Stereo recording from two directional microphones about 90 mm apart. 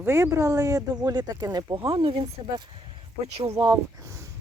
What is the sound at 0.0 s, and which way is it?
Speech, 35° right (ahead or behind).